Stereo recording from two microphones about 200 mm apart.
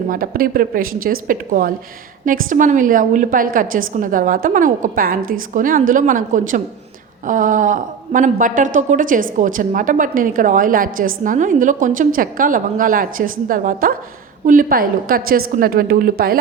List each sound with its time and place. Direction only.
0.1 s a woman's voice: 45° right (ahead or behind)